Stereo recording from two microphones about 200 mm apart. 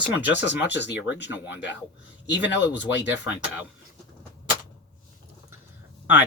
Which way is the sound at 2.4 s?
10° right (ahead or behind).